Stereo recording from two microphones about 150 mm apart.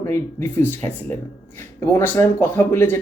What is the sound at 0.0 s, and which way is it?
Speech, 15° left (ahead or behind).